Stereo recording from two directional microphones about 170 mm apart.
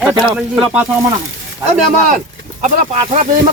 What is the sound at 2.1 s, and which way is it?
Speech, 45° right (ahead or behind).